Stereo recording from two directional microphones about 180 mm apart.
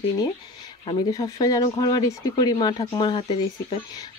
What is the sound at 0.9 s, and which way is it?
Speech, 20° left (ahead or behind).